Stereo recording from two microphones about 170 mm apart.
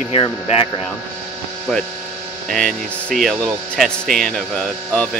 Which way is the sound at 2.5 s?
5° left (ahead or behind).